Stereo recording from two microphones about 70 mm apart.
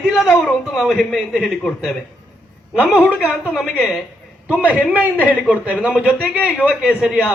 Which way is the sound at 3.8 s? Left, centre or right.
Centre.